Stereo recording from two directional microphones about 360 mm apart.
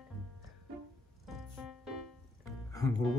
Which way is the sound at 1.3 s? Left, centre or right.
Centre.